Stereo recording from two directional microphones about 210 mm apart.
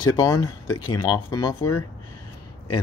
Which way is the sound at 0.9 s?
20° left (ahead or behind).